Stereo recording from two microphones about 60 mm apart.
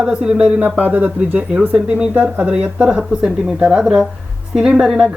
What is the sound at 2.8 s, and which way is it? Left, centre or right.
A woman's voice, centre.